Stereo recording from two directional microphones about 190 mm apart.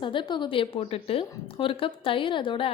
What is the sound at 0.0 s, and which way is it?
A woman's voice, 25° left (ahead or behind).